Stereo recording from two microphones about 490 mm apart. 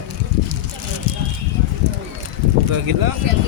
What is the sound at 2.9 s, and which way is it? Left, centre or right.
Speech, right.